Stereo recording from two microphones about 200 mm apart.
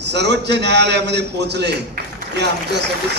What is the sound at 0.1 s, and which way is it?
A man's voice, 60° right (ahead or behind).